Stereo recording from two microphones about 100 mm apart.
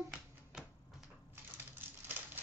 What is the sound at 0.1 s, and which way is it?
Typewriter, 10° right (ahead or behind).